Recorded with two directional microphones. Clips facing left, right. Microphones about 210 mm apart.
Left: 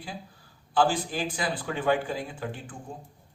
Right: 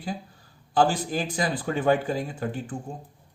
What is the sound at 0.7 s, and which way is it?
Speech, 40° right (ahead or behind).